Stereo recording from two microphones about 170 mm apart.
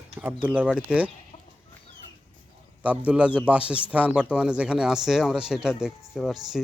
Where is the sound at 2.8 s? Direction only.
5° right (ahead or behind).